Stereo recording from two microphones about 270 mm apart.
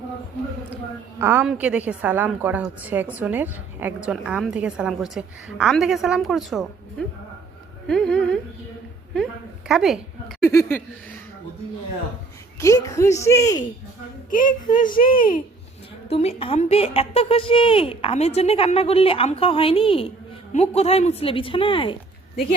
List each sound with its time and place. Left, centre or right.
1.2 s a woman's voice: centre
7.9 s a woman's voice: centre
12.5 s speech: centre
14.3 s a child's voice: left